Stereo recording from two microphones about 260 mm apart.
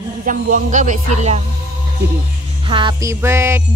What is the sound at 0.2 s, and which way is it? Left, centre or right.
Speech, right.